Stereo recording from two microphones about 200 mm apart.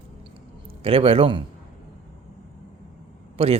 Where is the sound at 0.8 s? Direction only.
30° right (ahead or behind).